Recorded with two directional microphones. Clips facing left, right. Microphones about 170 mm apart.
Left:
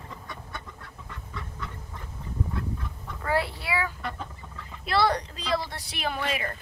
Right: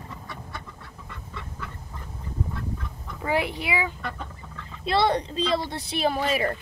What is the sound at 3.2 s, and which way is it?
Speech, 15° right (ahead or behind).